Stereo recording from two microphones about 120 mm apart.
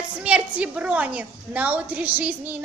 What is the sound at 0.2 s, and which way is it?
A woman's voice, 10° right (ahead or behind).